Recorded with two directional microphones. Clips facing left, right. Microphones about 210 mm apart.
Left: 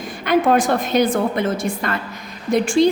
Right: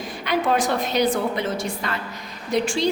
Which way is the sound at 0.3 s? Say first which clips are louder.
Left 6 dB; 50° left (ahead or behind).